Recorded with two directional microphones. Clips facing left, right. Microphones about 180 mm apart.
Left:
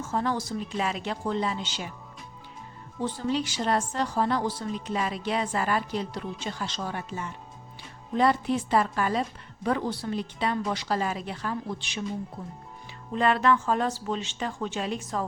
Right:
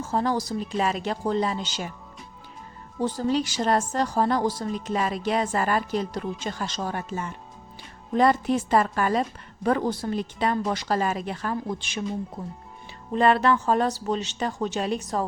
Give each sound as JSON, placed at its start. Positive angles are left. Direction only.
{"t": 0.0, "sound": "speech", "side_deg": -35}
{"t": 3.0, "sound": "a woman's voice", "side_deg": -40}
{"t": 13.1, "sound": "speech", "side_deg": -35}